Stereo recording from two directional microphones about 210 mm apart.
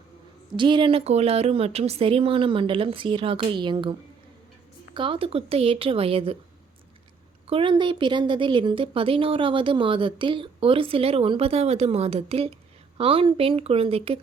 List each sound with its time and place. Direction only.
0.5 s a woman's voice: 25° right (ahead or behind)
4.9 s a woman's voice: 25° right (ahead or behind)
7.4 s a woman's voice: 25° right (ahead or behind)